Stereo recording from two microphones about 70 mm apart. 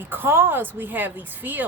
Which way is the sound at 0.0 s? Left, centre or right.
Right.